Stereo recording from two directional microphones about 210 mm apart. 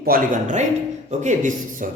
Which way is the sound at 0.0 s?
40° right (ahead or behind).